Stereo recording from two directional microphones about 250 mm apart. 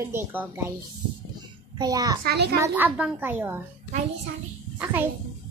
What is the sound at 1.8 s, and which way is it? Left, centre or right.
Speech, centre.